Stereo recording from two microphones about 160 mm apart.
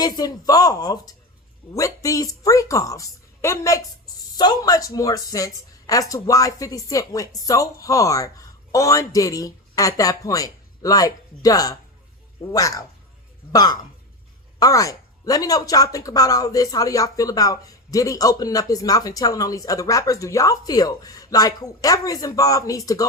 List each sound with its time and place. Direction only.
0.0 s speech: 25° left (ahead or behind)